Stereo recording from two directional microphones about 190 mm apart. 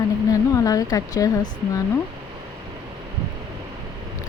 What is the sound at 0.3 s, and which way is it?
Speech, 20° left (ahead or behind).